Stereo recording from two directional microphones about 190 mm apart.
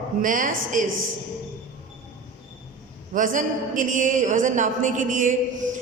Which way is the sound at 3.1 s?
45° right (ahead or behind).